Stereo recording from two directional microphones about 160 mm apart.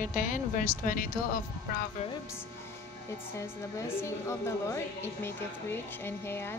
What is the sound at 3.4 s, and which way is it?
A woman's voice, 15° left (ahead or behind).